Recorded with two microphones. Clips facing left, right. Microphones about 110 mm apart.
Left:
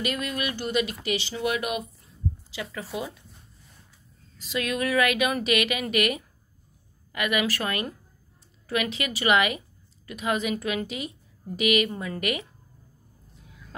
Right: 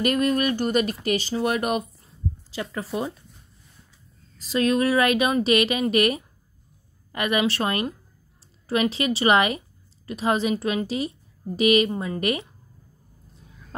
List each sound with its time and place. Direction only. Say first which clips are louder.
0.0 s speech: right 8 dB; 45° right (ahead or behind)
4.4 s a woman's voice: right 7 dB; 35° right (ahead or behind)
11.9 s speech: right 5 dB; 20° right (ahead or behind)
12.2 s a woman's voice: right 3 dB; 35° right (ahead or behind)